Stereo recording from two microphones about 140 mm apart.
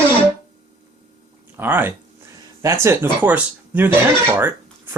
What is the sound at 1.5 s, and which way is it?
Speech, 15° right (ahead or behind).